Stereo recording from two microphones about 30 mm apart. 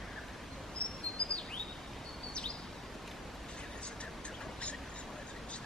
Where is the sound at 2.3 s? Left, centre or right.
Left.